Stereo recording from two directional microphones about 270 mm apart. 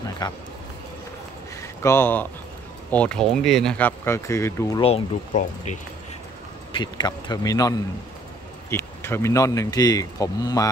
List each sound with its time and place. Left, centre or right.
0.2 s speech: centre
1.6 s speech: centre
4.8 s speech: left